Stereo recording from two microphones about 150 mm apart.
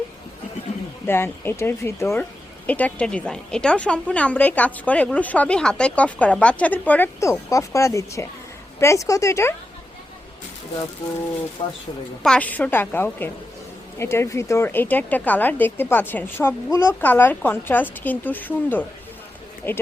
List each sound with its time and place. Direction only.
1.0 s a woman's voice: 15° left (ahead or behind)
11.6 s speech: 40° left (ahead or behind)
12.2 s a woman's voice: 5° left (ahead or behind)